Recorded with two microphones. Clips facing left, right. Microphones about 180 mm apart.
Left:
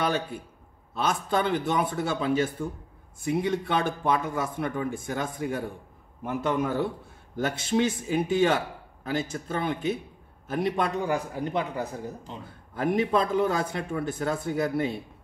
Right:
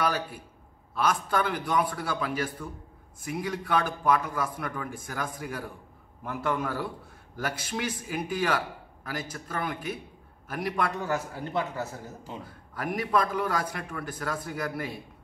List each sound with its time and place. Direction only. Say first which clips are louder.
0.0 s a man's voice: left 2 dB; 25° left (ahead or behind)